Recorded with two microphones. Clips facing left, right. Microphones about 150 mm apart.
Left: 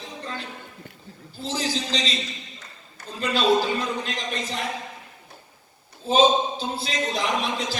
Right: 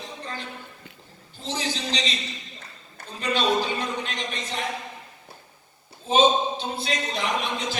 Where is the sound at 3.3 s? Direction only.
35° left (ahead or behind).